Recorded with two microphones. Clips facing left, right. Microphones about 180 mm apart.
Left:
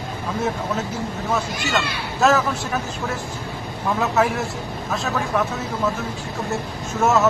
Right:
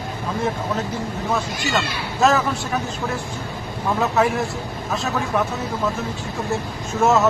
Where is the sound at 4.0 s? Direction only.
Centre (ahead or behind).